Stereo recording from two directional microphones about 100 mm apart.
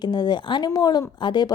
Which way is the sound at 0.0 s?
45° left (ahead or behind).